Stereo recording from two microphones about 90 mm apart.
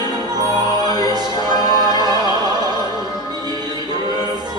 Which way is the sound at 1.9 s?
50° right (ahead or behind).